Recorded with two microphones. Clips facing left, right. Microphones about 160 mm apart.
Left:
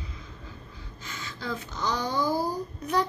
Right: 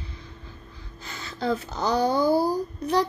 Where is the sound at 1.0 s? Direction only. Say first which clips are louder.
Right 8 dB; 35° right (ahead or behind).